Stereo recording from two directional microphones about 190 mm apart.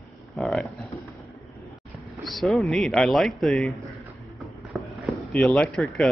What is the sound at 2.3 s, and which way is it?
Speech, centre (ahead or behind).